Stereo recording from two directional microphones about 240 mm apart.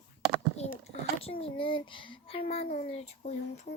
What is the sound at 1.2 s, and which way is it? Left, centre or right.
Speech, left.